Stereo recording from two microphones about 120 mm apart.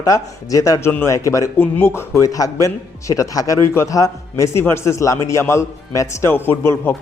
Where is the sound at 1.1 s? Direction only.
25° left (ahead or behind).